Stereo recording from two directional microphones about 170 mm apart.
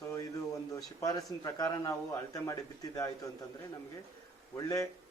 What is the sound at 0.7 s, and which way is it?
Speech, 20° left (ahead or behind).